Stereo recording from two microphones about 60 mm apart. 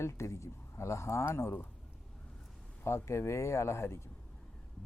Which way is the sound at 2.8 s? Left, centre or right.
Left.